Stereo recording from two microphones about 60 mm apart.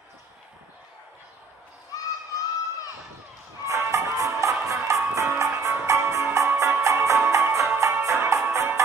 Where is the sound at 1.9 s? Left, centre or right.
Left.